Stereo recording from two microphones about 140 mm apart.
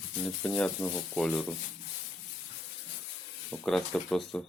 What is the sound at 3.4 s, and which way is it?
Speech, centre (ahead or behind).